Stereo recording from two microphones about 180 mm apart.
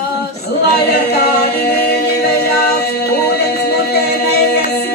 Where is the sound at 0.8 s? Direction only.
65° left (ahead or behind).